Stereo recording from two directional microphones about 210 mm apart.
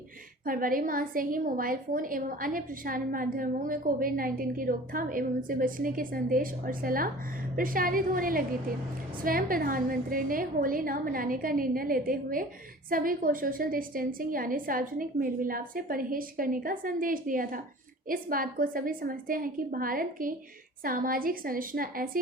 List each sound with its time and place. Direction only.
0.4 s a woman's voice: 40° right (ahead or behind)